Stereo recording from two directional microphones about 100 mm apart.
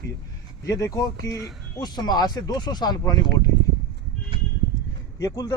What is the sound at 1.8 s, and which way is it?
Speech, 45° left (ahead or behind).